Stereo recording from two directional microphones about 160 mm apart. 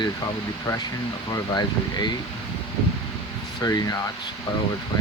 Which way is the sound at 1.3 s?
25° left (ahead or behind).